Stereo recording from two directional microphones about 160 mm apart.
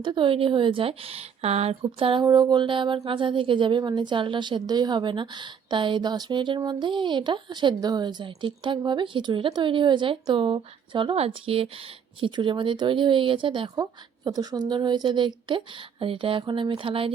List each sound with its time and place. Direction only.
0.0 s speech: 30° right (ahead or behind)